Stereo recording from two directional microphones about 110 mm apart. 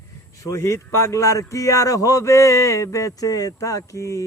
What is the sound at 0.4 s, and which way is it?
A man's voice, 25° left (ahead or behind).